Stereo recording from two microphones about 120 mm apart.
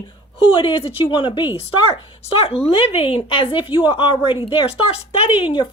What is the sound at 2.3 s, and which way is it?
A woman's voice, 55° left (ahead or behind).